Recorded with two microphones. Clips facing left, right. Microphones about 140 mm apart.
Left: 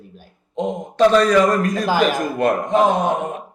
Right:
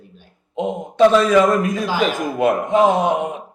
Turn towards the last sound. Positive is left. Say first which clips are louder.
# right 2 dB
turn(degrees=-10)  # may be behind; listen again after turning